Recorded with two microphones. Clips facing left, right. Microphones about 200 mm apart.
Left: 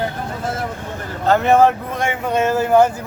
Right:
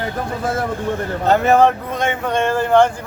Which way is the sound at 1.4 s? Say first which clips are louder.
Left 1 dB; centre (ahead or behind).